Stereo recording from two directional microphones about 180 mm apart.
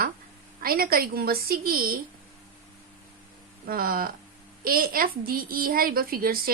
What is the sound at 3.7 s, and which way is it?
A woman's voice, 55° right (ahead or behind).